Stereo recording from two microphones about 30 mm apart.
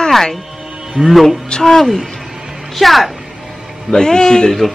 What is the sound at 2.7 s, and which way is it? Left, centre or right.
Speech, centre.